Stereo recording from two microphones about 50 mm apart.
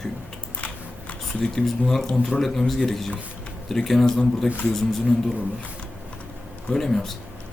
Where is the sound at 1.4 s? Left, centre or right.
Centre.